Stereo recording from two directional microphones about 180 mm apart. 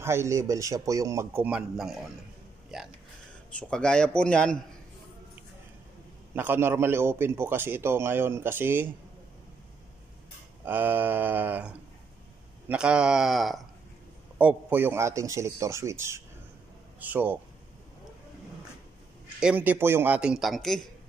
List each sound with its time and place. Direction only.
0.0 s a man's voice: 15° right (ahead or behind); by 4.6 s 5° left (ahead or behind)
6.3 s a man's voice: 10° right (ahead or behind)
10.6 s a man's voice: 10° right (ahead or behind)
19.4 s speech: 10° right (ahead or behind)